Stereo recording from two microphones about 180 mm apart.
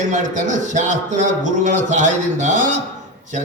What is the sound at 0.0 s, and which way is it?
A man's voice, 45° right (ahead or behind).